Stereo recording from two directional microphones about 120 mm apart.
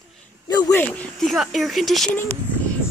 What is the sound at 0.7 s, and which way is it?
Speech, 15° left (ahead or behind).